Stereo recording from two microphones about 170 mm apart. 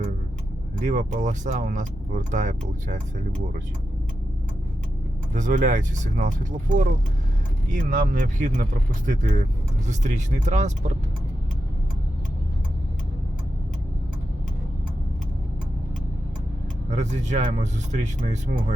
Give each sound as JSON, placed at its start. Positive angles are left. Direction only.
{"t": 0.9, "sound": "speech", "side_deg": -45}
{"t": 5.3, "sound": "speech", "side_deg": -50}
{"t": 16.9, "sound": "speech", "side_deg": -45}